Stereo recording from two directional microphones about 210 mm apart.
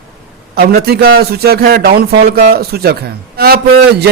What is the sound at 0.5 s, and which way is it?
Speech, 45° right (ahead or behind).